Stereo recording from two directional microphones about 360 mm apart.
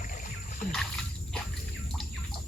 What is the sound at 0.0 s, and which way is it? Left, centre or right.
Boat, left.